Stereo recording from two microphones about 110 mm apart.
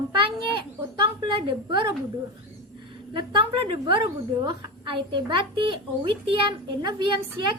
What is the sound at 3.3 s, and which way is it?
A woman's voice, 50° right (ahead or behind).